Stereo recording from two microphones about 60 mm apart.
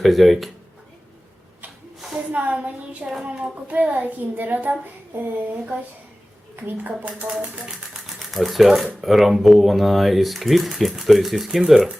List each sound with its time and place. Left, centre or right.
0.0 s speech: centre
2.1 s a child's voice: right
6.7 s a child's voice: right
8.3 s speech: centre